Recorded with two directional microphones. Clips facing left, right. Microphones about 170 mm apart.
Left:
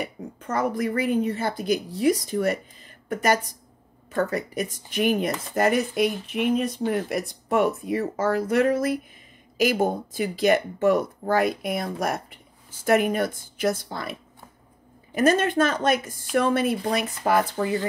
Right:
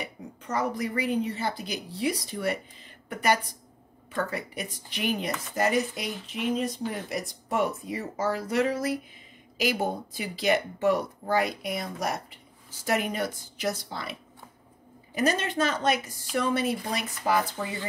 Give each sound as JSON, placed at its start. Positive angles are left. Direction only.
{"t": 0.0, "sound": "speech", "side_deg": 50}
{"t": 15.1, "sound": "speech", "side_deg": 50}